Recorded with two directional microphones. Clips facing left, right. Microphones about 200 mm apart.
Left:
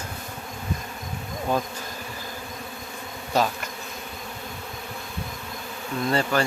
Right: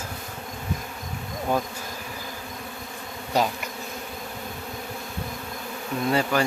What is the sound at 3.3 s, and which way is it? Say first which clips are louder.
Speech: even; 15° right (ahead or behind).